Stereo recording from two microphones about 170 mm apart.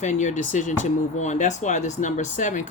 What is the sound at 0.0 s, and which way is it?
Speech, 45° left (ahead or behind).